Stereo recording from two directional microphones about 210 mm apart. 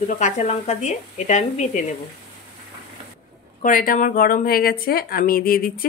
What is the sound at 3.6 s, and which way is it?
A woman's voice, 40° left (ahead or behind).